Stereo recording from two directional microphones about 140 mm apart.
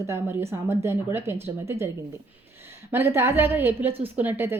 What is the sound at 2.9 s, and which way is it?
Speech, 15° right (ahead or behind).